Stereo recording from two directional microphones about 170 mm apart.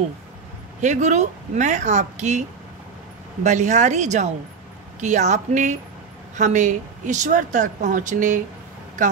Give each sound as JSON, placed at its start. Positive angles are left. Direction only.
{"t": 0.7, "sound": "speech", "side_deg": -45}
{"t": 3.4, "sound": "speech", "side_deg": -45}